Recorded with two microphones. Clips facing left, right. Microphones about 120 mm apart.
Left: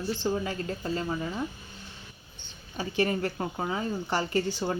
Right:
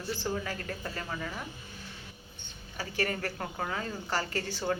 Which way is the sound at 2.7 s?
20° left (ahead or behind).